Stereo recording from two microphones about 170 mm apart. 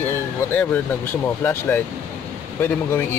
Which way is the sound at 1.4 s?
15° left (ahead or behind).